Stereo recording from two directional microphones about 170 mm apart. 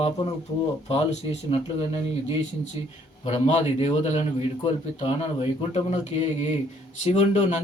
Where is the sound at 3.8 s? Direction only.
40° left (ahead or behind).